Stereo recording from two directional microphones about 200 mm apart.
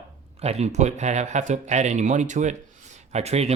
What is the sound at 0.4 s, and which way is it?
Speech, 30° right (ahead or behind).